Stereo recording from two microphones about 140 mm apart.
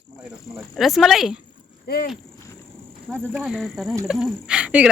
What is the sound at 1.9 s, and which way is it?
Speech, 90° left.